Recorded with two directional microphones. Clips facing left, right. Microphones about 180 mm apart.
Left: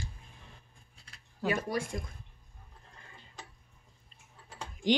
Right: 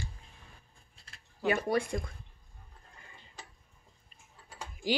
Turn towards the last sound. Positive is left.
turn(degrees=-10)  # may be behind; listen again after turning